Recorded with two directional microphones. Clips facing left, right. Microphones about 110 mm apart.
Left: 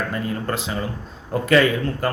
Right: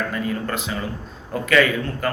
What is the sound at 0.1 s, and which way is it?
Speech, 30° left (ahead or behind).